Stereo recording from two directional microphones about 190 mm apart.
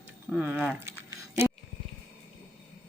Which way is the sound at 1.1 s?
10° right (ahead or behind).